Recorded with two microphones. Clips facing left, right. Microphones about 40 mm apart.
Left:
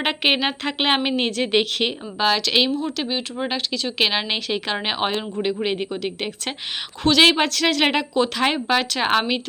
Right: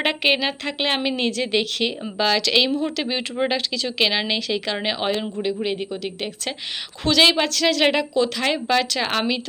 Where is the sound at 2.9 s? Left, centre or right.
Centre.